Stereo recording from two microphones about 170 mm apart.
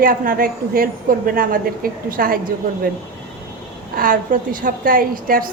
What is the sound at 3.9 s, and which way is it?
A woman's voice, 55° right (ahead or behind).